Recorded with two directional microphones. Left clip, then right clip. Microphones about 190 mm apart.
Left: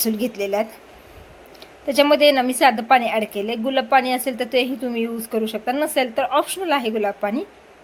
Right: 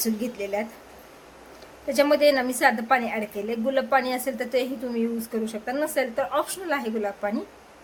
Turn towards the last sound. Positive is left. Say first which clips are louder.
# left 6 dB
turn(degrees=25)  # may be behind; listen again after turning